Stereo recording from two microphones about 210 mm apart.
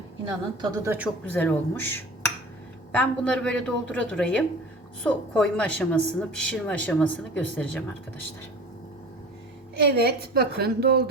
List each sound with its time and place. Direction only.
0.6 s speech: 10° right (ahead or behind)
1.2 s a woman's voice: 5° left (ahead or behind)
9.9 s a woman's voice: 50° right (ahead or behind)